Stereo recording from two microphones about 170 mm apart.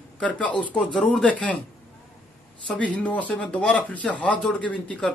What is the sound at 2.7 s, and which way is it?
Speech, 10° left (ahead or behind).